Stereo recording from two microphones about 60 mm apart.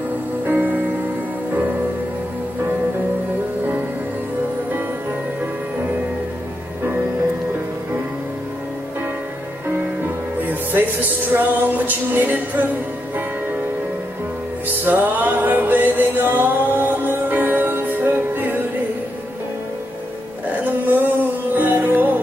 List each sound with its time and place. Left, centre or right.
0.5 s music: right
10.4 s music: right
14.9 s music: right
20.6 s a sound: right
21.5 s music: right